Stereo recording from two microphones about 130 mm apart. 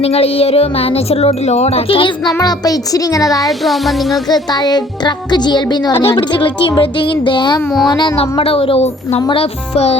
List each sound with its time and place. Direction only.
0.0 s speech: 50° left (ahead or behind); by 3.5 s 25° left (ahead or behind)
3.6 s speech: centre (ahead or behind)
4.3 s speech: 30° left (ahead or behind); by 10.0 s 55° left (ahead or behind)